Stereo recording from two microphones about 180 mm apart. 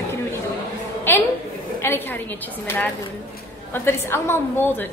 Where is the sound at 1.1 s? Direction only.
10° left (ahead or behind).